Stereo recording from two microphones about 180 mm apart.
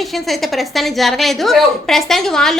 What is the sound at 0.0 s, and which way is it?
A woman's voice, centre (ahead or behind).